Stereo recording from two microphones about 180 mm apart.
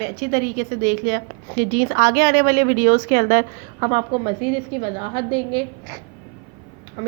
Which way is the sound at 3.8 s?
30° right (ahead or behind).